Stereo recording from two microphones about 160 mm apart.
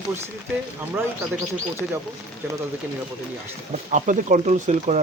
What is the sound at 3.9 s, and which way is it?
Speech, 50° right (ahead or behind).